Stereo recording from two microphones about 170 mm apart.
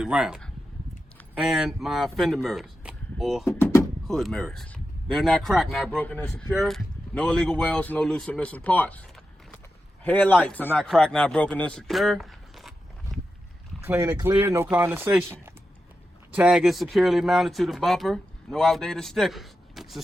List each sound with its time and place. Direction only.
0.0 s speech: 5° right (ahead or behind)
3.6 s a sound: 20° left (ahead or behind)
4.0 s speech: centre (ahead or behind)
13.8 s speech: 15° right (ahead or behind)